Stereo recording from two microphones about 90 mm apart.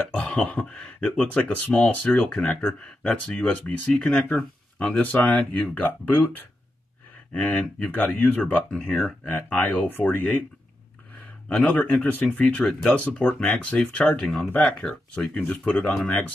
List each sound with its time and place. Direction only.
0.1 s speech: 10° left (ahead or behind)
11.4 s speech: 15° left (ahead or behind)